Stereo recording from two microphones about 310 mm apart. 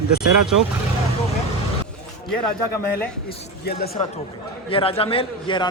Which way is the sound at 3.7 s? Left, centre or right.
Left.